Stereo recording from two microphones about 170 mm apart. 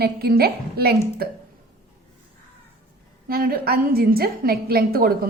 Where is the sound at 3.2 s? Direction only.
60° right (ahead or behind).